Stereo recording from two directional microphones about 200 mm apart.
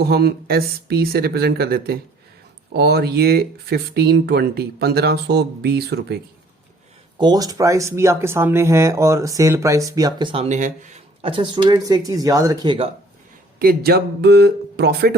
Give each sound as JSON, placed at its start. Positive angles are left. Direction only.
{"t": 0.0, "sound": "speech", "side_deg": -55}
{"t": 7.2, "sound": "speech", "side_deg": -20}
{"t": 13.6, "sound": "speech", "side_deg": -50}